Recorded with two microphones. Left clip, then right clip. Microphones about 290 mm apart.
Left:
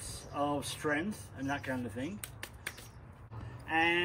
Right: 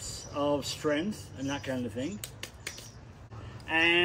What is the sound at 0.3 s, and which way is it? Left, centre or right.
Speech, centre.